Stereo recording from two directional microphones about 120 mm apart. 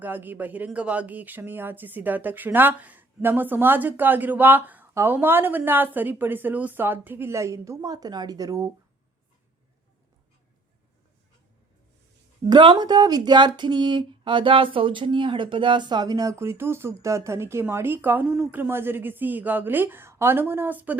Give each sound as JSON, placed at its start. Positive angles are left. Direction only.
{"t": 0.0, "sound": "speech", "side_deg": -15}
{"t": 12.5, "sound": "speech", "side_deg": -40}